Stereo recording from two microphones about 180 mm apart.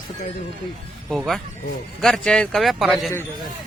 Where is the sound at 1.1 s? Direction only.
Centre (ahead or behind).